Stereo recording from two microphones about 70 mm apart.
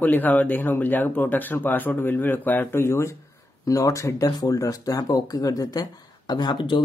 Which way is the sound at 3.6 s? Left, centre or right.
Left.